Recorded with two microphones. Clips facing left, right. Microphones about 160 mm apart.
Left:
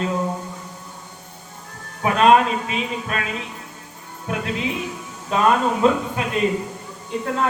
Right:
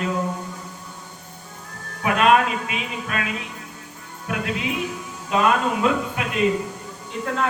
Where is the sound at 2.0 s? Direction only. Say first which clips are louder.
Left 3 dB; 30° left (ahead or behind).